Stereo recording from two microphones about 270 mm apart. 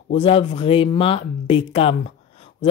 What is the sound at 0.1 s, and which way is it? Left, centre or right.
Speech, left.